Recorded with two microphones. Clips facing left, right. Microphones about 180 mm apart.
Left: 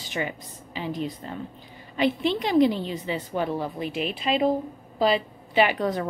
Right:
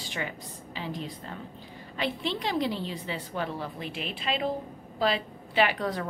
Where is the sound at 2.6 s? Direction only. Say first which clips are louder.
Left 8 dB; 55° left (ahead or behind).